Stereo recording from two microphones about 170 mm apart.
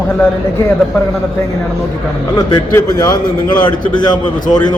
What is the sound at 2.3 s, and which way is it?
A man's voice, 20° left (ahead or behind).